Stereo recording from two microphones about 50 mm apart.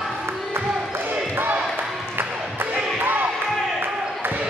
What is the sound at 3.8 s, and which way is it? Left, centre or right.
Basketball bounce, right.